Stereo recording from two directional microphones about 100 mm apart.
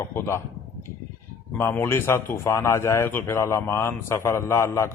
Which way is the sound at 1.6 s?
20° left (ahead or behind).